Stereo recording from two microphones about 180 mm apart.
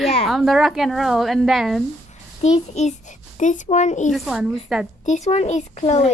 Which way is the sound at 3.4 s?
40° left (ahead or behind).